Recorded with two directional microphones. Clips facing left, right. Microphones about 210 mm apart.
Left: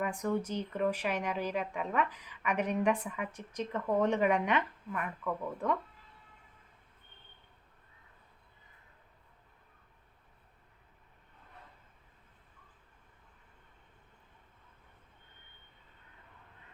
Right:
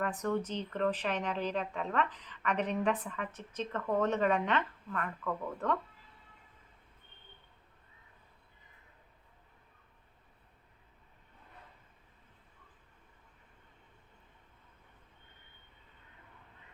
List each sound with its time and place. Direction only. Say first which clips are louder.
0.0 s speech: even; 10° left (ahead or behind)